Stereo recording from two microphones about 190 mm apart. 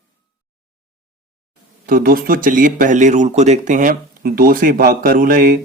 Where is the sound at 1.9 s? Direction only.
50° right (ahead or behind).